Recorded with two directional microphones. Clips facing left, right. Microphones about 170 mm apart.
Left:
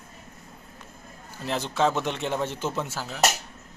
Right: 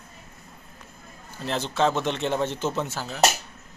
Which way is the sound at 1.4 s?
10° left (ahead or behind).